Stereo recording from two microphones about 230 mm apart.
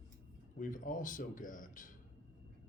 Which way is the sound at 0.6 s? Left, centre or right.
Left.